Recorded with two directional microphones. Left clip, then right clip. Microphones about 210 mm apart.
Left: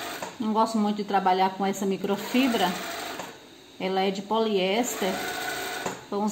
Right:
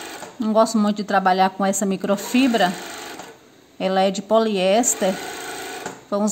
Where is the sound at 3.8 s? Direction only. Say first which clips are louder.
Right 7 dB; 55° right (ahead or behind).